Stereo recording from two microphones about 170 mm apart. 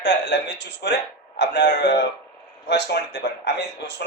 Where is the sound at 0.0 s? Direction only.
85° left.